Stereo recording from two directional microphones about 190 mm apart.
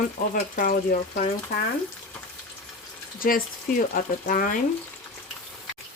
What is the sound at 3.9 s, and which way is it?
Speech, 45° left (ahead or behind).